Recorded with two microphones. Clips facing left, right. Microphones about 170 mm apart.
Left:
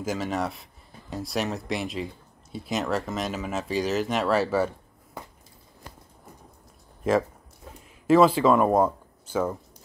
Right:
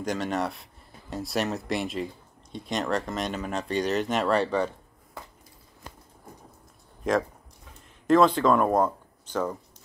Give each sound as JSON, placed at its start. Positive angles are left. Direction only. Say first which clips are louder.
{"t": 0.0, "sound": "speech", "louder": "even", "side_deg": 0}
{"t": 7.0, "sound": "speech", "louder": "left 2 dB", "side_deg": 5}